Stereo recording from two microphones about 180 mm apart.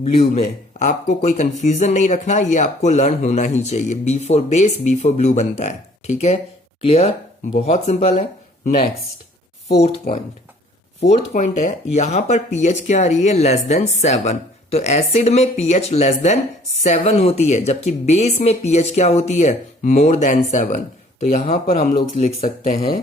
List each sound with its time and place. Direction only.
0.0 s speech: 35° left (ahead or behind)
11.3 s speech: 40° left (ahead or behind)